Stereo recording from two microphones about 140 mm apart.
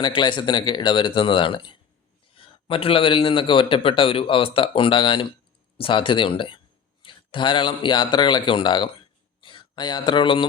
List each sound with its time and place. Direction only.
0.0 s a man's voice: 35° left (ahead or behind)
9.4 s a sound: 35° left (ahead or behind)
10.1 s a man's voice: 35° left (ahead or behind)